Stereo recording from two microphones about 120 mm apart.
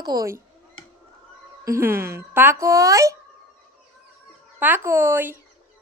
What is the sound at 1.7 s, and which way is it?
Speech, 20° right (ahead or behind).